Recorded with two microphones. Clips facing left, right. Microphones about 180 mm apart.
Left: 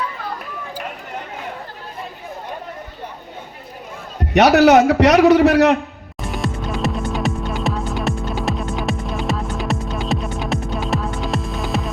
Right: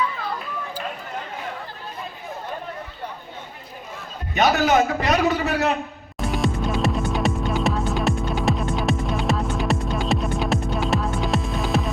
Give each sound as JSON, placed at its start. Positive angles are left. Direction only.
{"t": 4.4, "sound": "a man's voice", "side_deg": 80}
{"t": 6.1, "sound": "music", "side_deg": 0}